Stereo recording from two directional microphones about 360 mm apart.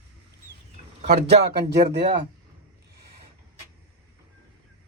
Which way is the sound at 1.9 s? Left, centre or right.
Right.